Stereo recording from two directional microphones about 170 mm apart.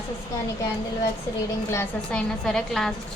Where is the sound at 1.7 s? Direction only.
15° left (ahead or behind).